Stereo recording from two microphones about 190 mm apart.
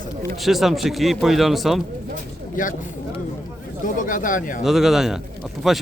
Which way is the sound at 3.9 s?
45° left (ahead or behind).